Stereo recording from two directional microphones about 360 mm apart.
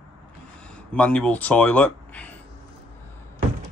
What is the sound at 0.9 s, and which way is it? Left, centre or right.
Speech, centre.